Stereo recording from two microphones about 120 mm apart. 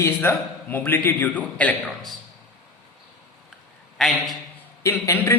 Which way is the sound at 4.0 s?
Centre (ahead or behind).